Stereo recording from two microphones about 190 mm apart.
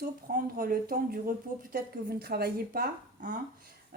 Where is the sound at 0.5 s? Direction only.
50° right (ahead or behind).